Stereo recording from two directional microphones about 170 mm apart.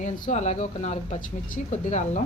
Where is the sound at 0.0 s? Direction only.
45° left (ahead or behind).